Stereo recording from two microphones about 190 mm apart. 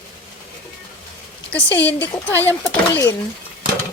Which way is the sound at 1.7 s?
65° left (ahead or behind).